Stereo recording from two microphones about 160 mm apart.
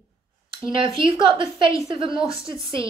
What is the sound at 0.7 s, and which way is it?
Speech, 30° right (ahead or behind).